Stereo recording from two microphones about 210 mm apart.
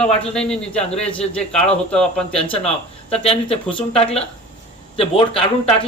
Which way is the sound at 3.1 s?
30° left (ahead or behind).